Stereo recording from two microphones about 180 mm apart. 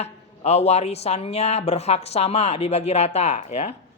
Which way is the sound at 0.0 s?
35° left (ahead or behind).